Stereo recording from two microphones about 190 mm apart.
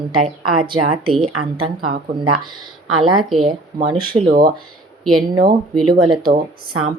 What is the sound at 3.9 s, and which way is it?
Speech, 30° right (ahead or behind).